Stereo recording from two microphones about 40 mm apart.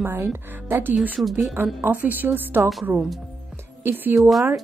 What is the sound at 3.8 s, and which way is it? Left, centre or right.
Speech, right.